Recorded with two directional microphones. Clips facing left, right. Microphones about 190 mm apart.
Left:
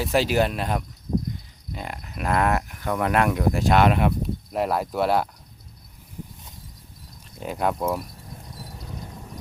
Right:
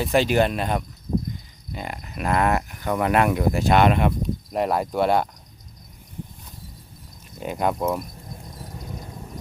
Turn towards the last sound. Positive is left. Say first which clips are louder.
# right 1 dB
turn(degrees=0)  # may be behind; listen again after turning